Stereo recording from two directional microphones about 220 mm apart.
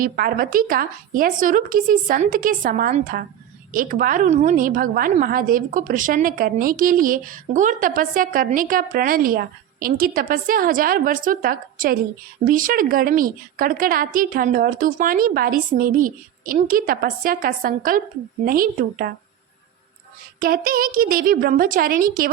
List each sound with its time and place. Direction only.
0.0 s a woman's voice: 40° right (ahead or behind)
20.4 s a woman's voice: 40° right (ahead or behind)